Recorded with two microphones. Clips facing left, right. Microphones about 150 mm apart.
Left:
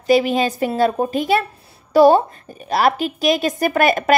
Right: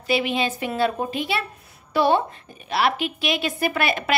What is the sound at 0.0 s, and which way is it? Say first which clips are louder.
A woman's voice: left 7 dB; 40° left (ahead or behind).